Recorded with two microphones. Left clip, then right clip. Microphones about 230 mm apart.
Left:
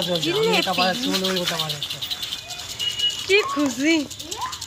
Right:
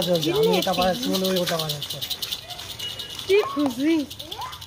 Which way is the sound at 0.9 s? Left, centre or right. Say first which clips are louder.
Left 1 dB; right.